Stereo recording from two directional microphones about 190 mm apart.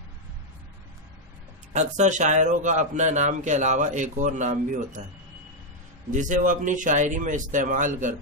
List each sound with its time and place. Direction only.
1.7 s a man's voice: 40° right (ahead or behind)
6.1 s a man's voice: 40° right (ahead or behind)